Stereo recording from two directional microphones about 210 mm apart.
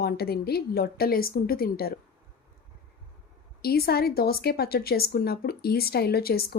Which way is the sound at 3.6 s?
45° left (ahead or behind).